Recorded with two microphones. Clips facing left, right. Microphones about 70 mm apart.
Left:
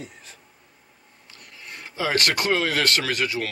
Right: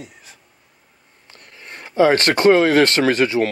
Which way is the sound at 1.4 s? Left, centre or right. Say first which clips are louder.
Right 3 dB; right.